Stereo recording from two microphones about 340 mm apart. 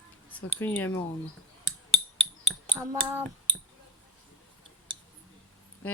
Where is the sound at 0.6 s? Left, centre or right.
Centre.